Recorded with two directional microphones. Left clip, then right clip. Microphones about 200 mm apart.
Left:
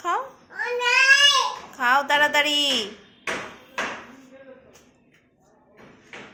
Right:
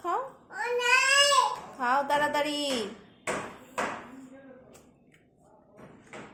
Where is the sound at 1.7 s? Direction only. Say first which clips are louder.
Left 8 dB; centre (ahead or behind).